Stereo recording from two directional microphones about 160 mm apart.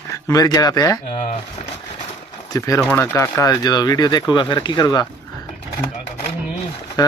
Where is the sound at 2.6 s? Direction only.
20° left (ahead or behind).